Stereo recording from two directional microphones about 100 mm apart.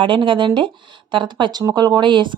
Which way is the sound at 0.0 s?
55° right (ahead or behind).